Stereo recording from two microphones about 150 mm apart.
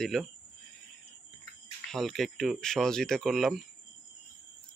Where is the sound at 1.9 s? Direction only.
Centre (ahead or behind).